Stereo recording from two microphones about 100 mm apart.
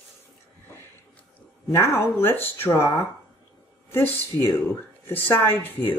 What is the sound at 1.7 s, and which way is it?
Speech, 25° left (ahead or behind).